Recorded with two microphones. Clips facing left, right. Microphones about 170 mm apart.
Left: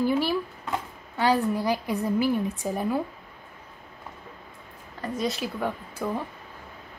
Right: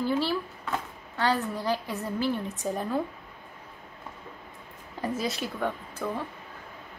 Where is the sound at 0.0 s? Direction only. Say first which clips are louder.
Left 3 dB; 15° left (ahead or behind).